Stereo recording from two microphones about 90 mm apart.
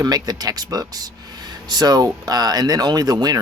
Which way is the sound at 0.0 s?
45° right (ahead or behind).